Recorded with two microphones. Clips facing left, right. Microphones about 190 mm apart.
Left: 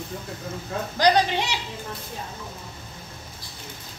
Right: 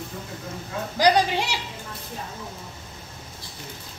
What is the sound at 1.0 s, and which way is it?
Speech, 10° right (ahead or behind).